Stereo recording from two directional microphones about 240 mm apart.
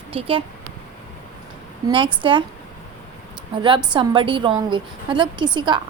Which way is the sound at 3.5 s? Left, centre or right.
Right.